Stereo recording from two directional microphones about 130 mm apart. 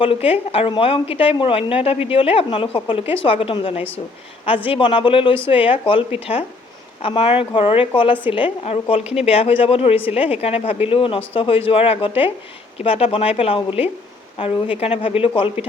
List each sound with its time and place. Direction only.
0.0 s speech: 45° left (ahead or behind)